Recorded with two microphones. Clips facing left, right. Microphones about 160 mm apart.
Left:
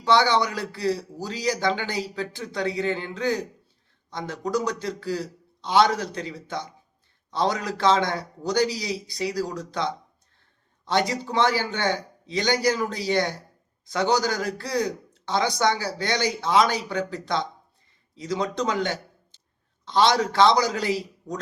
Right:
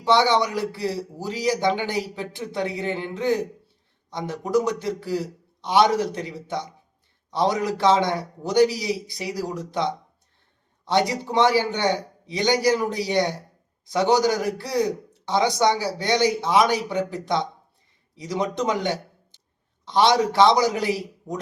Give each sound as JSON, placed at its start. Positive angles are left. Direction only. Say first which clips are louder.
{"t": 0.0, "sound": "a man's voice", "louder": "right 1 dB", "side_deg": -25}